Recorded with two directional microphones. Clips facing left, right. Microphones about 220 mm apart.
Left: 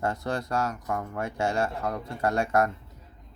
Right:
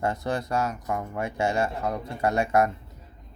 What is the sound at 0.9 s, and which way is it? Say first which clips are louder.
Speech: right 1 dB; 10° right (ahead or behind).